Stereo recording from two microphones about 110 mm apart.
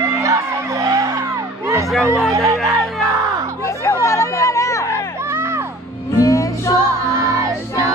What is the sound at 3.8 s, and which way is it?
Chatter, 25° left (ahead or behind).